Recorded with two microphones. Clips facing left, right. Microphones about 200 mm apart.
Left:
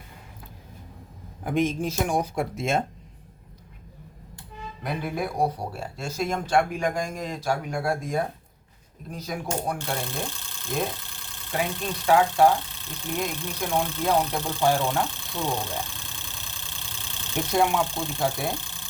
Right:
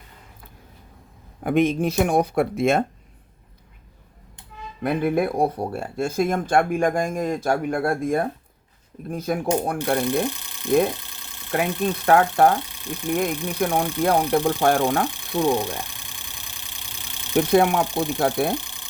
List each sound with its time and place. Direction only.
1.5 s speech: 60° right (ahead or behind)
4.8 s speech: 55° right (ahead or behind)
10.2 s speech: 15° right (ahead or behind)
11.1 s vehicle: 20° right (ahead or behind)
12.0 s speech: 55° right (ahead or behind)
12.8 s speech: 15° right (ahead or behind)
13.6 s speech: 55° right (ahead or behind)
15.4 s engine: 15° right (ahead or behind)
17.3 s speech: 60° right (ahead or behind)
17.8 s speech: 15° right (ahead or behind)
18.2 s speech: 60° right (ahead or behind)
18.5 s engine: 15° right (ahead or behind)